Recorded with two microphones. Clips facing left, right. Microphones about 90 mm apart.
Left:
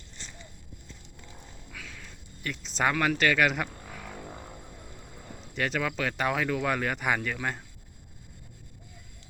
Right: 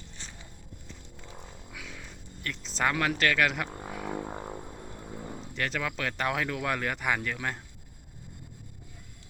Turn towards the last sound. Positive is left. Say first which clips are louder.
# left 1 dB
turn(degrees=5)  # may be behind; listen again after turning